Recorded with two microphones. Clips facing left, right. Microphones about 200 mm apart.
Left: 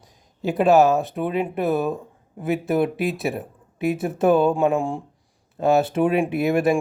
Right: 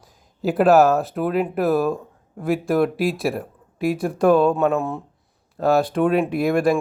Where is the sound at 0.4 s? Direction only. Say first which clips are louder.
Right 1 dB; centre (ahead or behind).